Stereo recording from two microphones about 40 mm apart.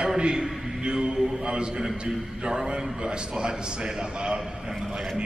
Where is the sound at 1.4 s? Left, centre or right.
Right.